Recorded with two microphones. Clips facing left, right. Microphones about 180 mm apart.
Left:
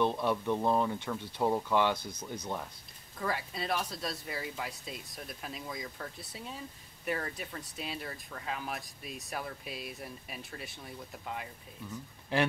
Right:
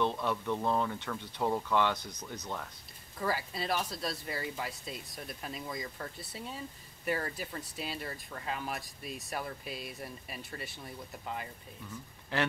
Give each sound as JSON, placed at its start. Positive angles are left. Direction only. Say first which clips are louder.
{"t": 0.0, "sound": "speech", "louder": "left 2 dB", "side_deg": 15}
{"t": 3.2, "sound": "speech", "louder": "right 1 dB", "side_deg": 0}
{"t": 11.9, "sound": "speech", "louder": "left 4 dB", "side_deg": 15}